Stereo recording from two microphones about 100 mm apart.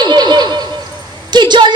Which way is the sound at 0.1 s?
45° right (ahead or behind).